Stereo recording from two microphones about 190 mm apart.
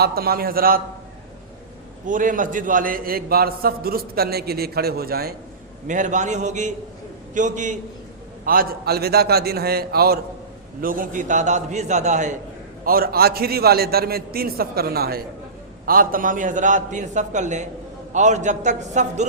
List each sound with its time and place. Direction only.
0.0 s a man's voice: 55° right (ahead or behind)
2.0 s a man's voice: 45° right (ahead or behind)
5.9 s a man's voice: 40° right (ahead or behind)
8.4 s a man's voice: 50° right (ahead or behind)
12.8 s a man's voice: 50° right (ahead or behind)